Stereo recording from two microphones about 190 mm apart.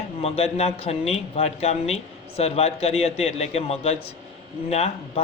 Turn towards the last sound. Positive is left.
turn(degrees=35)  # may be behind; listen again after turning